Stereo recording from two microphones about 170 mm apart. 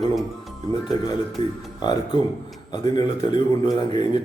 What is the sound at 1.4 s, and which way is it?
Speech, 30° left (ahead or behind).